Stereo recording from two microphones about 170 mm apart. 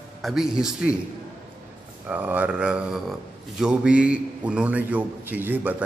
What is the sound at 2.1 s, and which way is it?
A man's voice, 10° right (ahead or behind).